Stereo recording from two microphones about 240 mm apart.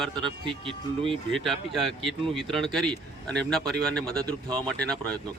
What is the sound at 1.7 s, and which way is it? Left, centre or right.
A man's voice, centre.